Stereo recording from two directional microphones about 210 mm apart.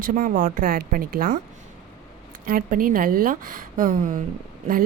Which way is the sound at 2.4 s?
40° right (ahead or behind).